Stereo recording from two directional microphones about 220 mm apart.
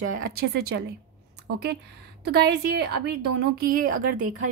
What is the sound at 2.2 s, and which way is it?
A woman's voice, 50° right (ahead or behind).